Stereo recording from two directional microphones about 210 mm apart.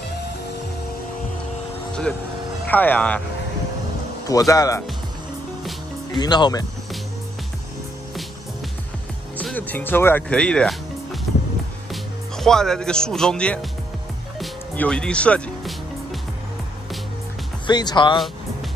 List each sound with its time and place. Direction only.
2.6 s speech: 10° left (ahead or behind)
4.3 s speech: 15° left (ahead or behind)
6.1 s speech: 20° left (ahead or behind)
9.4 s speech: 5° left (ahead or behind)
11.9 s speech: centre (ahead or behind)
14.4 s music: 5° left (ahead or behind)
17.6 s speech: 20° left (ahead or behind)